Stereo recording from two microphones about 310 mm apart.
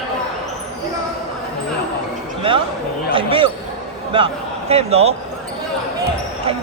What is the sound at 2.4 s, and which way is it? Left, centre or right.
Speech, centre.